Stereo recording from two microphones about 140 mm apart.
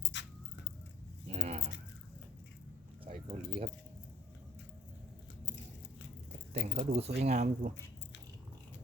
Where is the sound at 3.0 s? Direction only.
50° right (ahead or behind).